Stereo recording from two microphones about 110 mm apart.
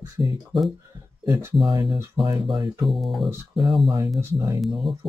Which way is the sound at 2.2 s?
45° right (ahead or behind).